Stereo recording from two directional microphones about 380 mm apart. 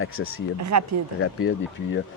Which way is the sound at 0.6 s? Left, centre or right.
Right.